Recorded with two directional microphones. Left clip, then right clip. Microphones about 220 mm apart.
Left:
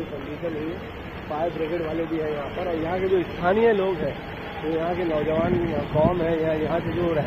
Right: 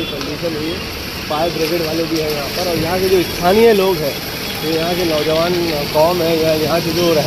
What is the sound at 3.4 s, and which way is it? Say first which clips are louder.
Speech: right 9 dB; 25° right (ahead or behind).